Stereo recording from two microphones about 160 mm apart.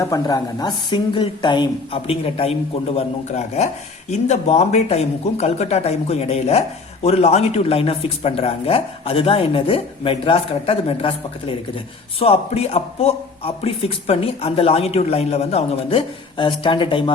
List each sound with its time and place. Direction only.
0.0 s speech: 20° left (ahead or behind)